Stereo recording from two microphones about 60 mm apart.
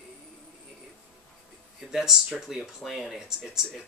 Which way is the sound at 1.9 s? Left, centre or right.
Centre.